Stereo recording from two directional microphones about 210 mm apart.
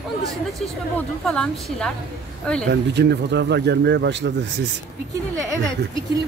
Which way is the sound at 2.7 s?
55° right (ahead or behind).